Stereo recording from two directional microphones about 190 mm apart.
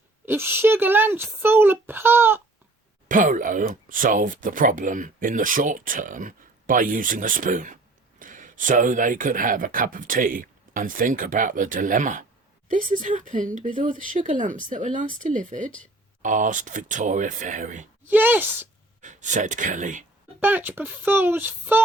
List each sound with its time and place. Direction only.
0.3 s a child's voice: 10° right (ahead or behind)
3.1 s speech: 40° right (ahead or behind)
18.1 s a child's voice: 10° right (ahead or behind)
19.0 s speech: 40° right (ahead or behind)
20.4 s a child's voice: 10° right (ahead or behind)